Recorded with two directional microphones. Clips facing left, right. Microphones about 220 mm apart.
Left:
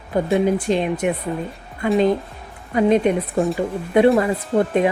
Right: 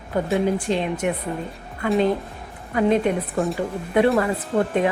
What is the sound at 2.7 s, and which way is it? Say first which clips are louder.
Speech: left 3 dB; 20° left (ahead or behind).